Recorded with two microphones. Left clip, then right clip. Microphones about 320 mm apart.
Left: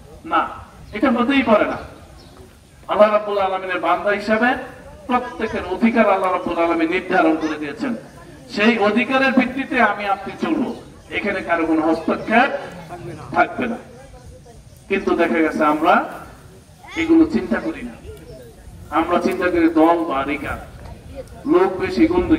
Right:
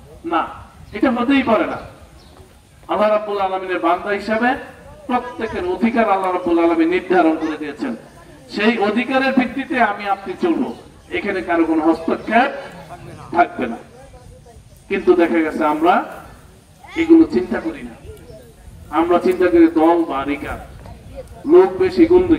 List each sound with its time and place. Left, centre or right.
0.9 s a man's voice: right
2.9 s a man's voice: right
14.9 s a man's voice: right
18.9 s a man's voice: right